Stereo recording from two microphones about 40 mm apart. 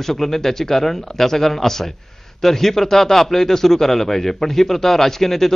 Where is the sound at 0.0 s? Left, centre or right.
Centre.